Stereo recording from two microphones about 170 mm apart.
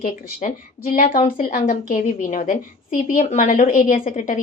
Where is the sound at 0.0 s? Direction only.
50° left (ahead or behind).